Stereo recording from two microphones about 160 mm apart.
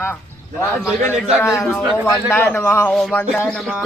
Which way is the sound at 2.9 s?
Centre (ahead or behind).